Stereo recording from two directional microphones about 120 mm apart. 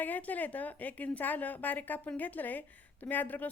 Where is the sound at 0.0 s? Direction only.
15° left (ahead or behind).